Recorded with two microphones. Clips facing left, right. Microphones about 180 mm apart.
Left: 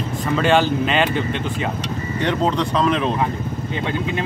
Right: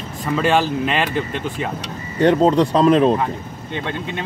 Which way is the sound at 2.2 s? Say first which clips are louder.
Right 7 dB; 40° right (ahead or behind).